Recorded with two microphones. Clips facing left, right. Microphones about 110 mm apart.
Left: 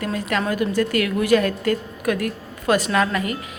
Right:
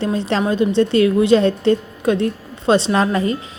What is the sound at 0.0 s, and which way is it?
A woman's voice, 25° right (ahead or behind).